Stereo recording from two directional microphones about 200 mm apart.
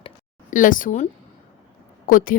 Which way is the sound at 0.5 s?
40° left (ahead or behind).